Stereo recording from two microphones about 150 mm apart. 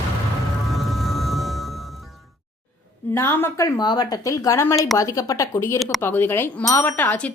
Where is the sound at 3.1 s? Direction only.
15° left (ahead or behind).